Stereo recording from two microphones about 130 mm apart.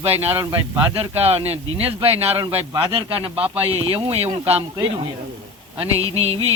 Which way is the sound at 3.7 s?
45° right (ahead or behind).